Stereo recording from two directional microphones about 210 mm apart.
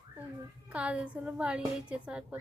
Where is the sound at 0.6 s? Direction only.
5° right (ahead or behind).